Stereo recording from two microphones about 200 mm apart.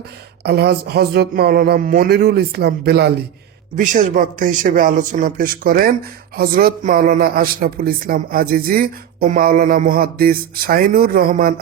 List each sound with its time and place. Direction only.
0.4 s speech: 55° right (ahead or behind)
3.8 s speech: 40° right (ahead or behind)